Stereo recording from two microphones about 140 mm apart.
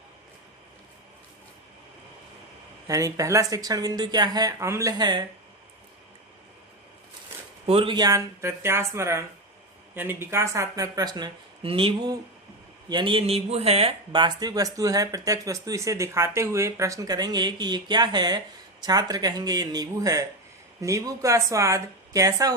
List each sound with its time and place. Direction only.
2.8 s speech: 25° right (ahead or behind)
7.3 s a sound: 15° right (ahead or behind)
7.7 s speech: 40° right (ahead or behind)
14.1 s speech: 30° right (ahead or behind)